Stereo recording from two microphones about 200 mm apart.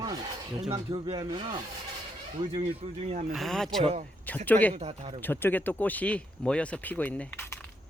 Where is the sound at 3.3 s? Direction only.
Centre (ahead or behind).